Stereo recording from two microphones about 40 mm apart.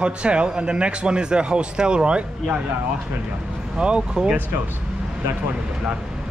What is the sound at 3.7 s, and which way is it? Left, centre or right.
Speech, right.